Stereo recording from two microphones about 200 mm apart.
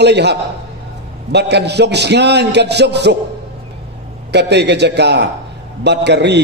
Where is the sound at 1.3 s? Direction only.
55° right (ahead or behind).